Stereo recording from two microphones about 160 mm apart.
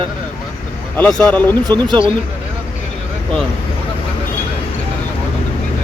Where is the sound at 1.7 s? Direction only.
30° right (ahead or behind).